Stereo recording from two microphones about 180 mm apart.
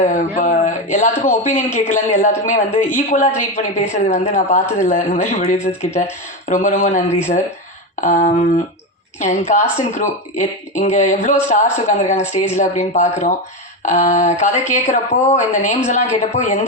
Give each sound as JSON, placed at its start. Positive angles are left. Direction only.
{"t": 0.0, "sound": "a woman's voice", "side_deg": 45}